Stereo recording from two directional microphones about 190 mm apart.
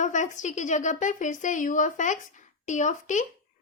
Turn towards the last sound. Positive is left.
turn(degrees=40)  # may be behind; listen again after turning